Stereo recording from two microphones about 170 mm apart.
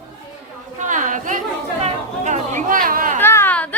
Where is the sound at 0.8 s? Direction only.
50° right (ahead or behind).